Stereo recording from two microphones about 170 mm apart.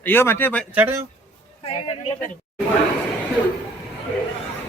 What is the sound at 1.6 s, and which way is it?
Speech, 35° left (ahead or behind).